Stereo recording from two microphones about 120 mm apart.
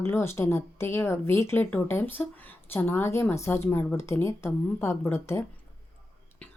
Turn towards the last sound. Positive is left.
turn(degrees=20)  # may be behind; listen again after turning